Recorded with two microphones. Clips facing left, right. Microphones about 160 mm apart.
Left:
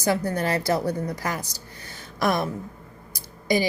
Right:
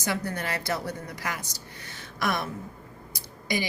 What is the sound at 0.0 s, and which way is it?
A woman's voice, 40° left (ahead or behind).